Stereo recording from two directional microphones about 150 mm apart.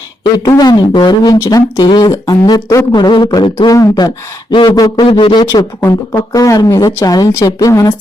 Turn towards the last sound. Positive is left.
turn(degrees=25)  # may be behind; listen again after turning